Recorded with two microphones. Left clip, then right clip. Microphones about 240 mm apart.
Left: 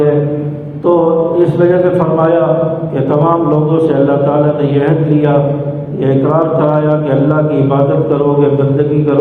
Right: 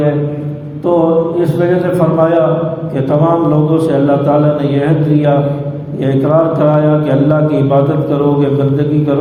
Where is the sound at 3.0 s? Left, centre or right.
Right.